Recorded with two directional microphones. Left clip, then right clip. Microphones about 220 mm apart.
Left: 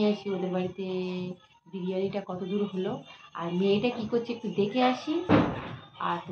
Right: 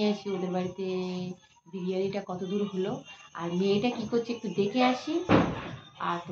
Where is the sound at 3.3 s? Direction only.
5° right (ahead or behind).